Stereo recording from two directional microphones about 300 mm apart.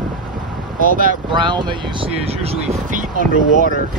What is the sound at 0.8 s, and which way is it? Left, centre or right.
Speech, right.